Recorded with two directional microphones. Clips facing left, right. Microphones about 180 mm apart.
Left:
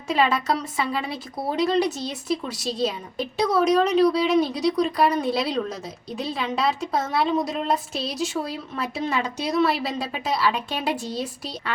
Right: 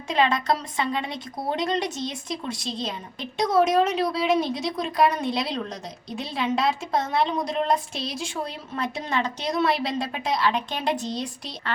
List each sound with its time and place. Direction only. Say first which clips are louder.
0.1 s a woman's voice: left 1 dB; 5° left (ahead or behind)